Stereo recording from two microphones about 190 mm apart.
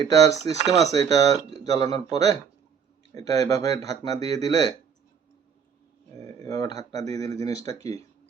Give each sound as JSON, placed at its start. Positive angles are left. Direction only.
{"t": 0.0, "sound": "speech", "side_deg": 20}
{"t": 6.1, "sound": "speech", "side_deg": 20}